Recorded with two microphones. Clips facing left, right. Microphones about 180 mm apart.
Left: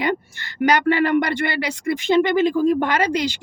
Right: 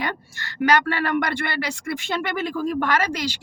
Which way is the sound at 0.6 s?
15° left (ahead or behind).